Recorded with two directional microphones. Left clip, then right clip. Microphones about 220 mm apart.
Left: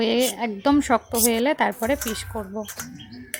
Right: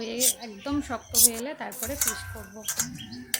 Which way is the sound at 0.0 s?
30° left (ahead or behind).